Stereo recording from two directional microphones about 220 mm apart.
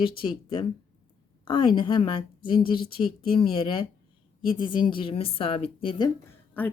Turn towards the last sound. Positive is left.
turn(degrees=10)  # may be behind; listen again after turning